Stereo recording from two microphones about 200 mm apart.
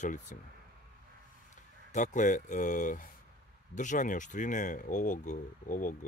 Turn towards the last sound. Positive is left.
turn(degrees=40)  # may be behind; listen again after turning